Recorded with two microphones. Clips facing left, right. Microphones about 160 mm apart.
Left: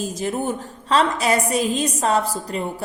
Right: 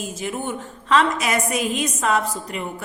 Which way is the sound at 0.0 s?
35° left (ahead or behind).